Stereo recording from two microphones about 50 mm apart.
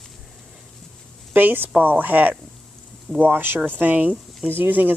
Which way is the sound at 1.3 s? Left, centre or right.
Right.